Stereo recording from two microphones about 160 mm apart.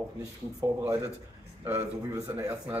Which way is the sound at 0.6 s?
20° right (ahead or behind).